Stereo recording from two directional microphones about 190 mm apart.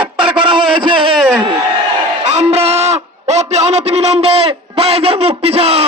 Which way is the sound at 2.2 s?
35° right (ahead or behind).